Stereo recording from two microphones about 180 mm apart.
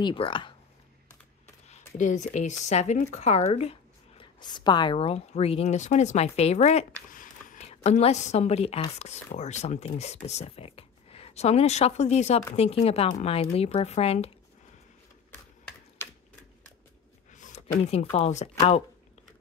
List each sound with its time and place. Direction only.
0.0 s speech: 30° left (ahead or behind)
2.0 s speech: 45° left (ahead or behind)
4.2 s speech: 25° left (ahead or behind)
17.3 s a sound: 40° left (ahead or behind)
18.1 s speech: 40° left (ahead or behind)